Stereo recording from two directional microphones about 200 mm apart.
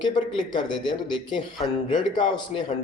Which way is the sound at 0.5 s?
25° left (ahead or behind).